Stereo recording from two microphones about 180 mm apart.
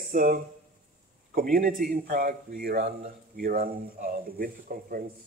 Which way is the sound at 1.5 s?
50° right (ahead or behind).